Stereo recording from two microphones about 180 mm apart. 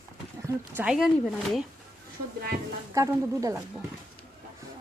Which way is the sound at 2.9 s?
15° right (ahead or behind).